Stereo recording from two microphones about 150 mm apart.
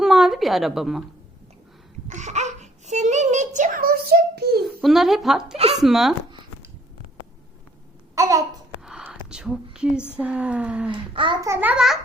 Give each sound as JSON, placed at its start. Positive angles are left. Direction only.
{"t": 0.0, "sound": "a woman's voice", "side_deg": 0}
{"t": 2.0, "sound": "babbling", "side_deg": -50}
{"t": 4.6, "sound": "a woman's voice", "side_deg": 0}
{"t": 8.1, "sound": "babbling", "side_deg": -20}
{"t": 8.8, "sound": "a sound", "side_deg": -5}
{"t": 10.1, "sound": "speech", "side_deg": -10}
{"t": 10.9, "sound": "a child's voice", "side_deg": -35}
{"t": 11.3, "sound": "a child's voice", "side_deg": -20}
{"t": 11.7, "sound": "speech", "side_deg": -5}